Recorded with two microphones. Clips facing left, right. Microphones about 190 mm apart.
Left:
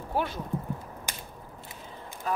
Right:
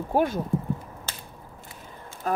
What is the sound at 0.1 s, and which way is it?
Speech, 45° right (ahead or behind).